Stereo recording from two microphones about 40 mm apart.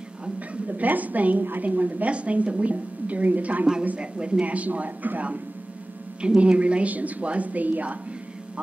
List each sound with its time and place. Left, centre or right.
0.4 s a woman's voice: right
4.0 s a woman's voice: right
6.2 s a woman's voice: right